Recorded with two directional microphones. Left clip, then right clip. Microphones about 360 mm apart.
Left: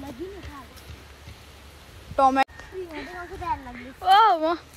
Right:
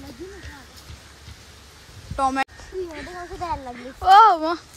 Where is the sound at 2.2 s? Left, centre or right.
Centre.